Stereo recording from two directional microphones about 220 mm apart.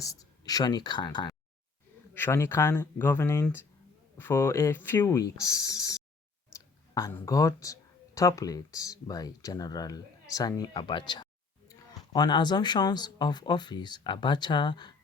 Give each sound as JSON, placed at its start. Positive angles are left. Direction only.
{"t": 0.0, "sound": "speech", "side_deg": 15}